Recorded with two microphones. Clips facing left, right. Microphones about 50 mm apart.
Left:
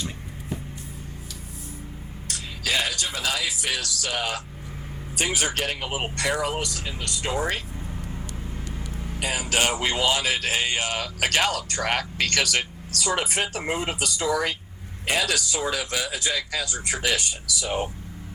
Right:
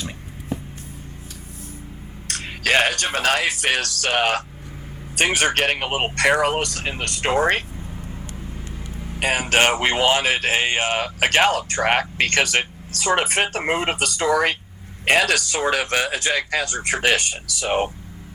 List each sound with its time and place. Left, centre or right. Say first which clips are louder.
2.2 s speech: right 7 dB; right
8.9 s vehicle: right 1 dB; centre
9.1 s a man's voice: right 7 dB; right